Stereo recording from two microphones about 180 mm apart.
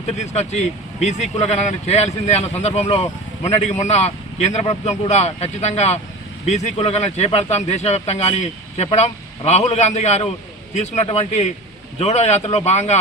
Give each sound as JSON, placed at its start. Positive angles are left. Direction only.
{"t": 0.2, "sound": "speech", "side_deg": 40}